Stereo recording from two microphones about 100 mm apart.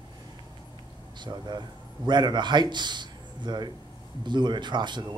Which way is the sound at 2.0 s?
50° right (ahead or behind).